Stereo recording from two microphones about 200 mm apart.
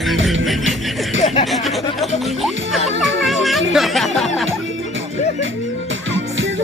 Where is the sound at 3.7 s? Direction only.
Centre (ahead or behind).